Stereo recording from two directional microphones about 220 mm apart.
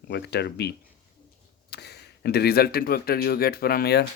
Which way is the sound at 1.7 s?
50° left (ahead or behind).